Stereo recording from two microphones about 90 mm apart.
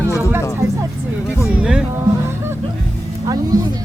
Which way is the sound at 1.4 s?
10° right (ahead or behind).